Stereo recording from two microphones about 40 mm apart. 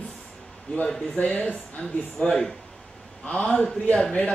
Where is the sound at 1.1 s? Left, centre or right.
Left.